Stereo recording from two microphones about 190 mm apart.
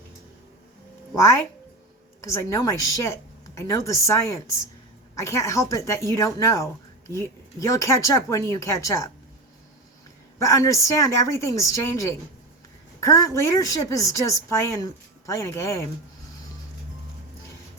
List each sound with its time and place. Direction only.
2.2 s a woman's voice: 15° left (ahead or behind)
10.3 s a woman's voice: 15° left (ahead or behind)